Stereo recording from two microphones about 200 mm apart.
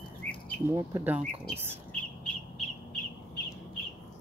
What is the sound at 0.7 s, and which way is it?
Speech, 10° right (ahead or behind).